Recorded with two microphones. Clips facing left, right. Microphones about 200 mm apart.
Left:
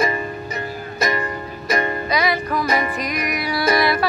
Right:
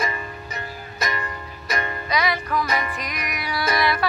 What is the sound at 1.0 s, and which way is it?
Music, 45° left (ahead or behind).